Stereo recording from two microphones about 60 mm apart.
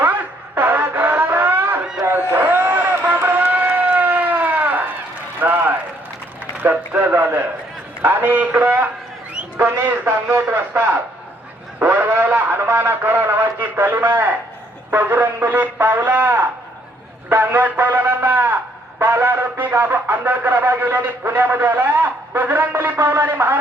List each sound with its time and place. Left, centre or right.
0.0 s wail: right
2.3 s a sound: right
5.4 s run: right
6.6 s a man's voice: right
11.8 s a sound: right
14.8 s a man's voice: right